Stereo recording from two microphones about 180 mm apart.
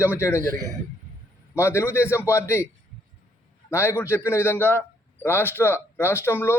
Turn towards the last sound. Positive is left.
turn(degrees=15)  # may be behind; listen again after turning